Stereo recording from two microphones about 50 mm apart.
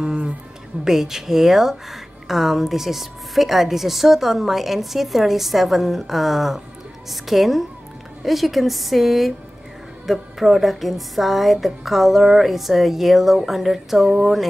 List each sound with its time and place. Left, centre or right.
0.0 s music: centre
0.8 s a woman's voice: centre